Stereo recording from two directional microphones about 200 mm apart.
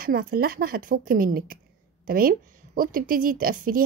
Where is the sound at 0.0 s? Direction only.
45° right (ahead or behind).